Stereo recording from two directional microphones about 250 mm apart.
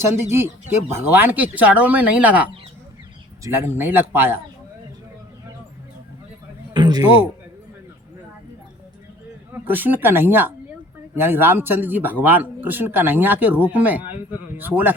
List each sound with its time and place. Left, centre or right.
0.2 s a man's voice: centre
6.7 s a sound: centre
9.5 s a man's voice: centre